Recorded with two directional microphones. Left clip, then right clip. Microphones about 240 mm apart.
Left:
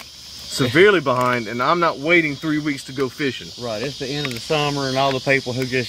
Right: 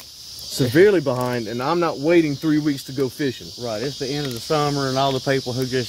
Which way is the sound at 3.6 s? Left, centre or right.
Centre.